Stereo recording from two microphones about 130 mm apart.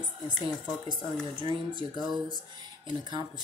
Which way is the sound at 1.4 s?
40° right (ahead or behind).